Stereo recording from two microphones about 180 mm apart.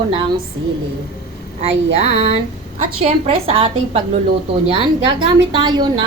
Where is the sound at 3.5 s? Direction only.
30° right (ahead or behind).